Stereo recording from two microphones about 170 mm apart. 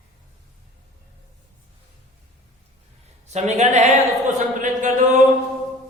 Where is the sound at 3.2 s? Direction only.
40° right (ahead or behind).